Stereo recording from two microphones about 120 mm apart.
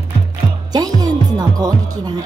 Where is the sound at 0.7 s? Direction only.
35° right (ahead or behind).